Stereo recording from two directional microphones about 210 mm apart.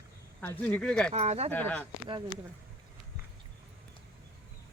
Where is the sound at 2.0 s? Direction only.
20° right (ahead or behind).